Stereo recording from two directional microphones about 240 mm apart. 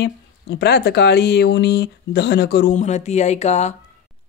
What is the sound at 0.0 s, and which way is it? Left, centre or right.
Speech, left.